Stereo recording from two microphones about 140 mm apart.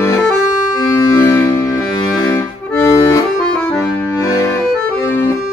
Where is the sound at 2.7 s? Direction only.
20° left (ahead or behind).